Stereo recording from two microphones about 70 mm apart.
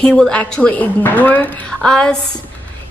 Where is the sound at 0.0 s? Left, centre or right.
Centre.